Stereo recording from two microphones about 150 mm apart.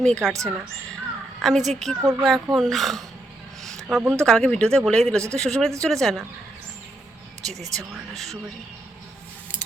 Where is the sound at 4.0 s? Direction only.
10° right (ahead or behind).